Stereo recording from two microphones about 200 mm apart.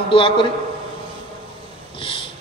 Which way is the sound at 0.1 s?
25° left (ahead or behind).